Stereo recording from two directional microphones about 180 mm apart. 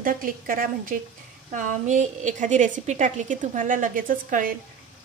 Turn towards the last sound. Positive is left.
turn(degrees=-50)  # may be behind; listen again after turning